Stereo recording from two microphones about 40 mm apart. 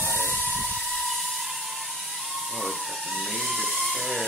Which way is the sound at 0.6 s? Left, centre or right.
Centre.